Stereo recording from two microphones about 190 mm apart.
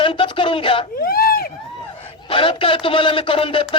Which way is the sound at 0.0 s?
25° left (ahead or behind).